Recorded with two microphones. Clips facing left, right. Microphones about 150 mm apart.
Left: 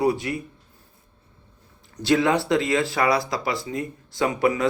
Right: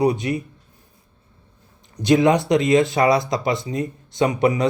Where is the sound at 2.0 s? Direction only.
20° right (ahead or behind).